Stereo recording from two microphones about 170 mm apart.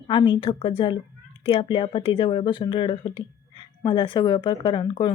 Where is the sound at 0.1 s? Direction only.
25° left (ahead or behind).